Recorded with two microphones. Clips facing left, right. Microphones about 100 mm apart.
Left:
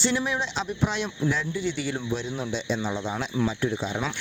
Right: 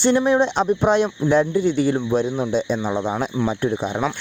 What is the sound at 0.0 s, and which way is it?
Speech, 45° right (ahead or behind).